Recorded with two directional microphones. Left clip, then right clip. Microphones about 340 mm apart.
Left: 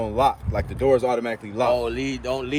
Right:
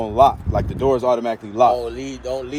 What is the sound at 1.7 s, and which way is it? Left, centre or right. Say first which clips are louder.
Speech: even; centre.